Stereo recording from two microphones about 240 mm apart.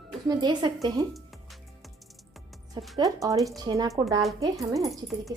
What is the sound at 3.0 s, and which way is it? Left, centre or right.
Speech, centre.